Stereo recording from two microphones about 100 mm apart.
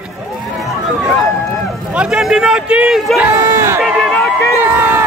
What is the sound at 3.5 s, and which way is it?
Crowd, 25° right (ahead or behind).